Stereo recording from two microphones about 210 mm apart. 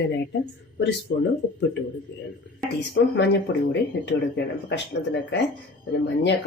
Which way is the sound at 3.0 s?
65° left (ahead or behind).